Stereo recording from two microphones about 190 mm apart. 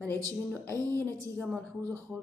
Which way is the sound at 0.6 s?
10° left (ahead or behind).